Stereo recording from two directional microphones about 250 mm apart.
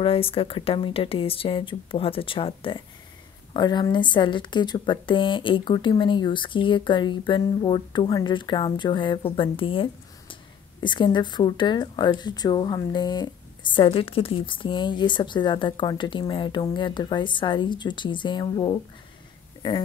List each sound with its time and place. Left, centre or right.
0.0 s speech: left